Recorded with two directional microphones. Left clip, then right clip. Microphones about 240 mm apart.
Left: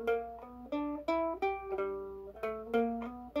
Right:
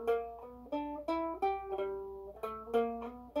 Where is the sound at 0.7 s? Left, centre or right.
Left.